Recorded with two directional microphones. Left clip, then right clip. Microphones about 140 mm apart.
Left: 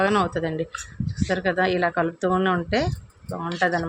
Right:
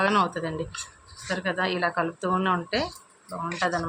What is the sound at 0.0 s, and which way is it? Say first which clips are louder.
Speech: left 2 dB; 35° left (ahead or behind).